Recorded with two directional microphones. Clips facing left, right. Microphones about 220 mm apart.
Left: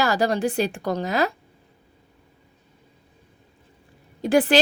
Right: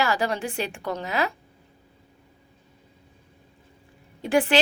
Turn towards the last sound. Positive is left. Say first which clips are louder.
# left 3 dB
turn(degrees=35)  # may be behind; listen again after turning